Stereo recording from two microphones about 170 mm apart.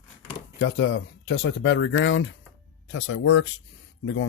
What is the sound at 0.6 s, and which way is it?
Speech, 90° left.